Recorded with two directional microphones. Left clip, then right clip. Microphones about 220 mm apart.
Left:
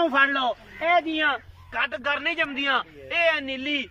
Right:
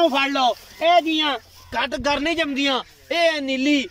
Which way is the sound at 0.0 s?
15° right (ahead or behind).